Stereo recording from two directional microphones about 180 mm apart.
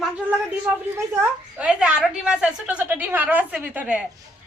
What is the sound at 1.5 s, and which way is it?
A woman's voice, 5° right (ahead or behind).